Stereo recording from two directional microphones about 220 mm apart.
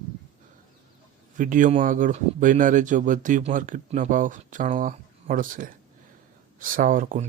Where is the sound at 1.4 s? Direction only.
35° right (ahead or behind).